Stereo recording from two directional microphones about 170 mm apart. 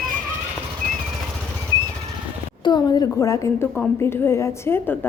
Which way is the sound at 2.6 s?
25° left (ahead or behind).